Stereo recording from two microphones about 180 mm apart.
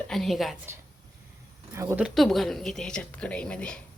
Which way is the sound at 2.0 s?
Centre (ahead or behind).